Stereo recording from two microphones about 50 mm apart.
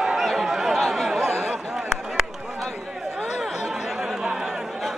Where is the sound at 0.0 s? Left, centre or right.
Centre.